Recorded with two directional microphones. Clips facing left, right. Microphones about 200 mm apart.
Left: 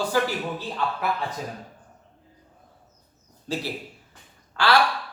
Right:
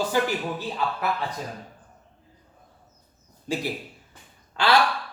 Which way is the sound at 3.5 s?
10° right (ahead or behind).